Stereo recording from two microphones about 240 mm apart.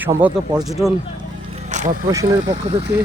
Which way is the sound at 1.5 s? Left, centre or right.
Right.